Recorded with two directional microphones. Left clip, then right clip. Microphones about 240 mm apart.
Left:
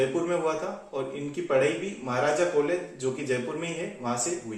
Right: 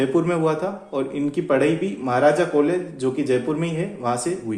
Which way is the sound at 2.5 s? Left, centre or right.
Right.